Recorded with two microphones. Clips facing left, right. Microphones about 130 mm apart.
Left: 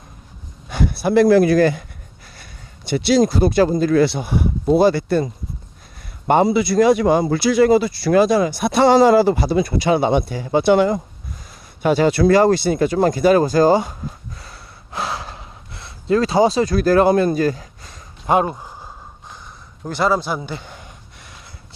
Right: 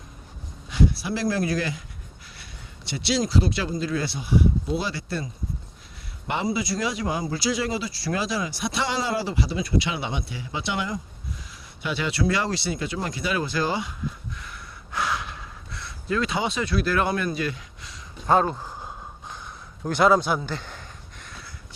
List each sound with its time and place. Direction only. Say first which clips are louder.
0.7 s speech: left 6 dB; 60° left (ahead or behind)
1.5 s speech: left 13 dB; 50° left (ahead or behind)
6.4 s speech: left 10 dB; 65° left (ahead or behind); by 13.9 s 40° left (ahead or behind)
14.3 s gasp: left 1 dB; 35° left (ahead or behind)
18.3 s speech: left 3 dB; 15° left (ahead or behind)
19.8 s a man's voice: even; 5° left (ahead or behind)